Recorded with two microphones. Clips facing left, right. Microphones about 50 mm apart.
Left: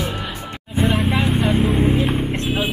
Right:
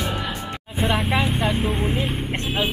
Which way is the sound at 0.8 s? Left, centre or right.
Centre.